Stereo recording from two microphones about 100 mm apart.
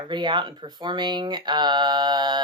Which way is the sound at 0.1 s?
50° right (ahead or behind).